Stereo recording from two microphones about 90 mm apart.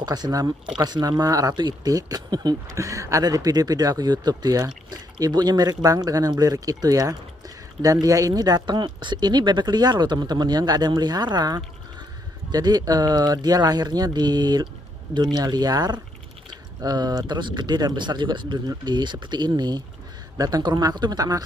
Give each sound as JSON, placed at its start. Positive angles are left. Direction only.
{"t": 0.0, "sound": "speech", "side_deg": -50}
{"t": 1.5, "sound": "speech", "side_deg": -55}
{"t": 1.9, "sound": "speech", "side_deg": -40}
{"t": 2.8, "sound": "speech", "side_deg": -35}
{"t": 16.4, "sound": "a sound", "side_deg": -50}
{"t": 17.3, "sound": "speech", "side_deg": -55}